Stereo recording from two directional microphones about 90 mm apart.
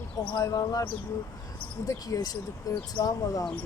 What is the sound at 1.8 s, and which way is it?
Speech, 45° left (ahead or behind).